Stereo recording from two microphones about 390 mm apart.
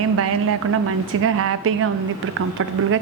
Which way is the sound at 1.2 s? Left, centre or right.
Right.